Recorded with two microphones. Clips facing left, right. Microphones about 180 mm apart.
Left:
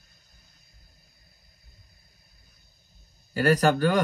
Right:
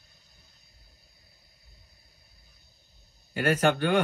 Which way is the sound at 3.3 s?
40° left (ahead or behind).